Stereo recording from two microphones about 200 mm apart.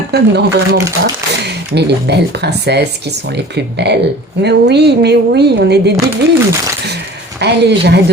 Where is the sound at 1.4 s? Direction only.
55° right (ahead or behind).